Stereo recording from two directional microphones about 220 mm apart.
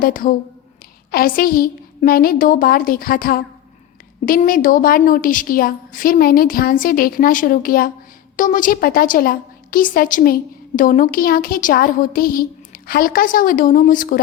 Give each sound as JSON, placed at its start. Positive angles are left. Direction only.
{"t": 0.0, "sound": "a woman's voice", "side_deg": 40}